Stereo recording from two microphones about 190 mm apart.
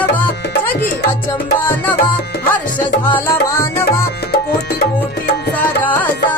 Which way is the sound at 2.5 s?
10° left (ahead or behind).